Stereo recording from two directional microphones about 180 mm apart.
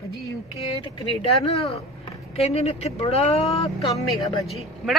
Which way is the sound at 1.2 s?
35° left (ahead or behind).